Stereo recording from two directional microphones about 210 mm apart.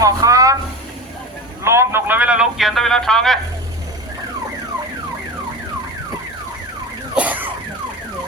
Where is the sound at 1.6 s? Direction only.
10° right (ahead or behind).